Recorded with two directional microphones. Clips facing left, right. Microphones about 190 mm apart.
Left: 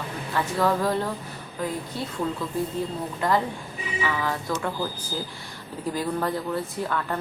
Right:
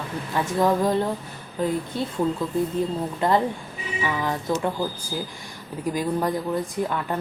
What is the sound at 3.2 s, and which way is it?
Speech, 20° right (ahead or behind).